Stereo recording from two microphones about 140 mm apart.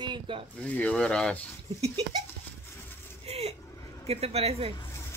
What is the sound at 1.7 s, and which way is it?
Speech, 50° right (ahead or behind).